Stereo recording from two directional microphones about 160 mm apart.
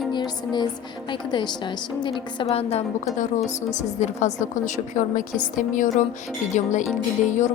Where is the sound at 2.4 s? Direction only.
40° left (ahead or behind).